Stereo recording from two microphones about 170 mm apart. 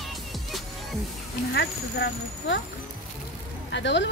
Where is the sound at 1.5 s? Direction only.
90° left.